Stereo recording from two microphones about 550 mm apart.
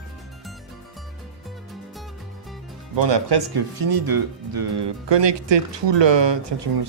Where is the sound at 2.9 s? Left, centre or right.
Right.